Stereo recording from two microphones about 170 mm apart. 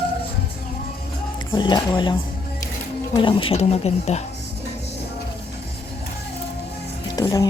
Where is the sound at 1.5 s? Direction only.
25° left (ahead or behind).